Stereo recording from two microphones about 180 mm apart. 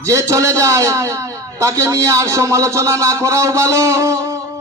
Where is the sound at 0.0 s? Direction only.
15° right (ahead or behind).